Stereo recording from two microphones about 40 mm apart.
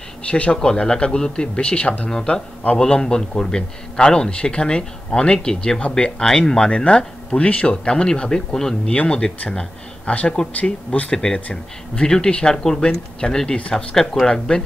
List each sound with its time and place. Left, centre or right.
0.3 s a man's voice: left
2.0 s a man's voice: centre
10.0 s speech: left
11.1 s a man's voice: left
13.6 s a man's voice: left
14.2 s speech: centre